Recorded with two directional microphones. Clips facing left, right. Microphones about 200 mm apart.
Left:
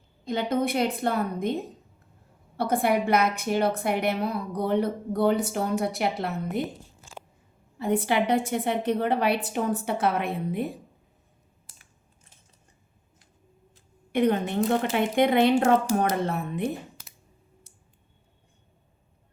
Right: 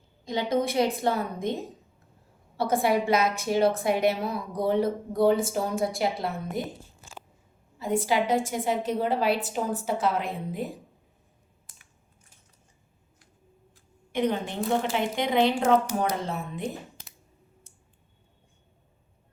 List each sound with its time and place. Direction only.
0.3 s a woman's voice: 55° left (ahead or behind)
7.8 s a woman's voice: 60° left (ahead or behind)
14.1 s a woman's voice: 60° left (ahead or behind)